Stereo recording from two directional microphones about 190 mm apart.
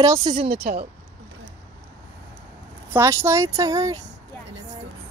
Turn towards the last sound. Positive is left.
turn(degrees=-15)  # may be behind; listen again after turning